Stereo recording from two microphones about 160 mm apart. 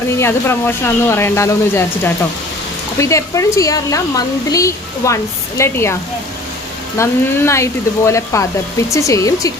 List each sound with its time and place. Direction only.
0.2 s speech: 15° left (ahead or behind)
7.0 s speech: 15° left (ahead or behind)